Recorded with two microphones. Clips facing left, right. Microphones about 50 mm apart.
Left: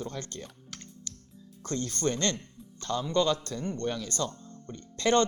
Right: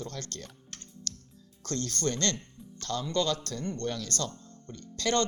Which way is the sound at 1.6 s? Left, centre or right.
Centre.